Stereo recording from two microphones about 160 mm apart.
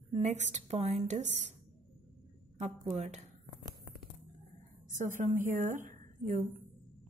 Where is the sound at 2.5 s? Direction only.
45° right (ahead or behind).